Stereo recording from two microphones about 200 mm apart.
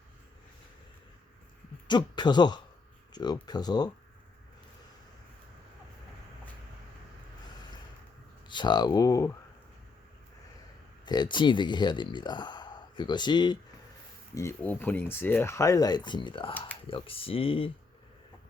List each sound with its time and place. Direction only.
1.9 s speech: 20° left (ahead or behind)
3.1 s a sound: 20° left (ahead or behind)
3.4 s speech: 20° left (ahead or behind)
8.4 s speech: 20° left (ahead or behind)
11.0 s speech: 20° left (ahead or behind)
14.3 s speech: 10° left (ahead or behind); by 17.7 s 25° left (ahead or behind)